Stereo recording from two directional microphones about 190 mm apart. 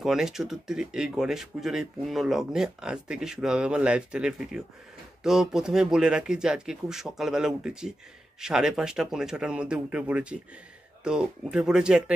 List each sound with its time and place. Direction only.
0.0 s speech: centre (ahead or behind)